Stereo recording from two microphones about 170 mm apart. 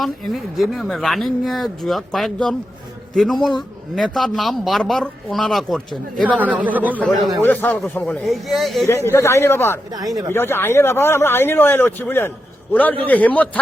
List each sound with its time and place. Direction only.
0.0 s speech: centre (ahead or behind)
7.4 s speech: 10° left (ahead or behind)
8.9 s a man's voice: 15° left (ahead or behind)
10.0 s speech: 20° right (ahead or behind)
10.3 s a man's voice: 15° left (ahead or behind)